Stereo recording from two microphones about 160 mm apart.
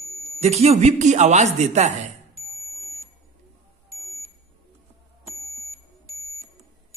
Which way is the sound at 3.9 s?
20° right (ahead or behind).